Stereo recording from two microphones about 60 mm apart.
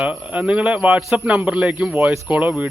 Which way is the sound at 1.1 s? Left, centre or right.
Centre.